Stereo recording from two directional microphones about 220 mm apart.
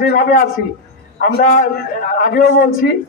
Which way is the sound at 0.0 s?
40° left (ahead or behind).